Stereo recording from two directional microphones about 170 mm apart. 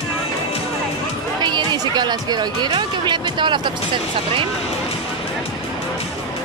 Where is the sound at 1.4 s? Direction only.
25° right (ahead or behind).